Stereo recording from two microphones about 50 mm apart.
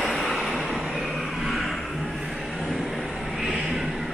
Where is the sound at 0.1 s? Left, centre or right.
Centre.